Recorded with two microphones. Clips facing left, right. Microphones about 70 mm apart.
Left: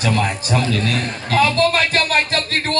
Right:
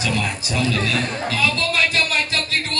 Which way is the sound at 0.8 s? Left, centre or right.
Left.